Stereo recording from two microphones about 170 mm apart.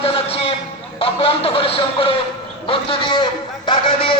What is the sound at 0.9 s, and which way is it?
A man's voice, 35° left (ahead or behind).